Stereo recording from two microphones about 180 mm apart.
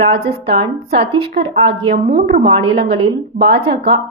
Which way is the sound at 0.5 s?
35° right (ahead or behind).